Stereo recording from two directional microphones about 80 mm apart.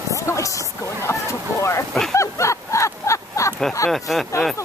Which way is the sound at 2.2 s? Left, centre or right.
Left.